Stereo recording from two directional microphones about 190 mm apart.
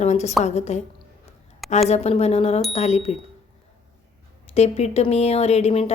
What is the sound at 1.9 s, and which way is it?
A woman's voice, 35° left (ahead or behind).